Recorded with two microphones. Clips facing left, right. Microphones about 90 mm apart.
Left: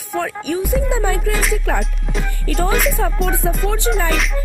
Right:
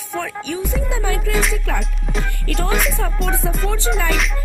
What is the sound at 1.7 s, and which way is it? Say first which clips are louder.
Speech: left 2 dB; centre (ahead or behind).